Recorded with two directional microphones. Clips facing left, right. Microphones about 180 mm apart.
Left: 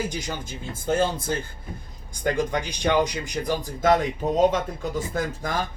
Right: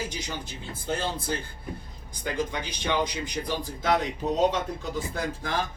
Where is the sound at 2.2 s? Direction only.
45° left (ahead or behind).